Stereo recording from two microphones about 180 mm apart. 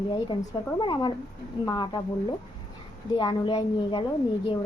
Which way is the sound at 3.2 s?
25° left (ahead or behind).